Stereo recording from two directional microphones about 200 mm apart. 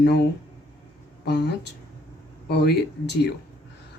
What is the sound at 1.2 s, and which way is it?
Speech, 55° left (ahead or behind).